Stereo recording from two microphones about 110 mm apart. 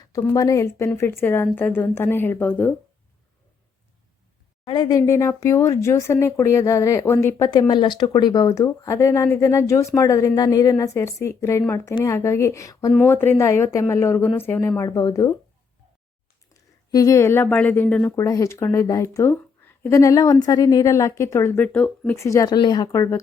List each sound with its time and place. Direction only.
0.3 s speech: 30° left (ahead or behind)
4.6 s speech: 40° left (ahead or behind)
7.4 s speech: 40° left (ahead or behind); by 14.7 s 20° left (ahead or behind)
14.8 s speech: 30° left (ahead or behind)
16.6 s a woman's voice: 30° left (ahead or behind)
18.2 s speech: 30° left (ahead or behind)
22.1 s speech: 25° left (ahead or behind)
22.5 s speech: 40° left (ahead or behind)